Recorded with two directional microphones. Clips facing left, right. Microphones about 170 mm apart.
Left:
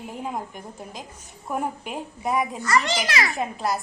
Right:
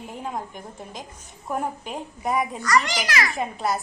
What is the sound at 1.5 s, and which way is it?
Speech, 5° left (ahead or behind).